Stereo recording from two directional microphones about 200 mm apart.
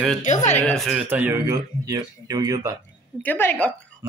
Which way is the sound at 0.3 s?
35° left (ahead or behind).